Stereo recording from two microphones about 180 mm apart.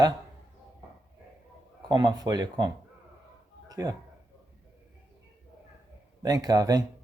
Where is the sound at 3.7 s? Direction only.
20° right (ahead or behind).